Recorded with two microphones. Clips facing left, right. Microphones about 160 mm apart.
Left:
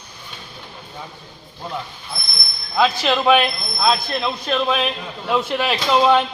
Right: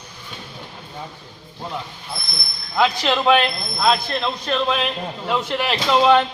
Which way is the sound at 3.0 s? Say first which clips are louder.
Left 1 dB; 10° left (ahead or behind).